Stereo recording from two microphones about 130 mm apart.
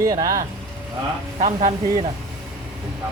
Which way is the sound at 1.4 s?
65° right (ahead or behind).